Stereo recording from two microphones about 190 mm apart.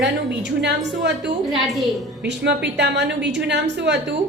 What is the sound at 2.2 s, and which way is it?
A woman's voice, 65° right (ahead or behind).